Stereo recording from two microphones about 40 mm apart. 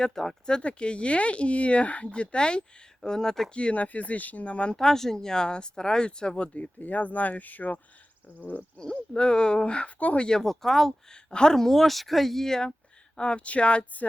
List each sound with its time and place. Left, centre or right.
0.0 s speech: centre
0.6 s speech: left
3.5 s speech: left
3.8 s speech: left
4.7 s speech: centre; by 8.6 s left
9.1 s speech: left
10.2 s speech: centre
11.1 s speech: left
11.5 s speech: centre
13.1 s speech: left